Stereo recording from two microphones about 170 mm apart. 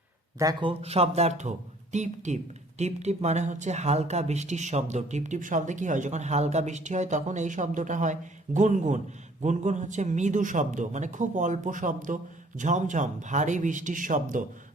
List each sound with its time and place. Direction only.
0.3 s speech: 20° right (ahead or behind)
0.7 s speech: 35° right (ahead or behind)